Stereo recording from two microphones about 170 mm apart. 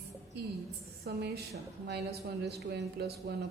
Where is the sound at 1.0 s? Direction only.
80° right.